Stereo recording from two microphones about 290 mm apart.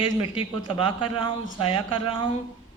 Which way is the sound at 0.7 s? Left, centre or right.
Centre.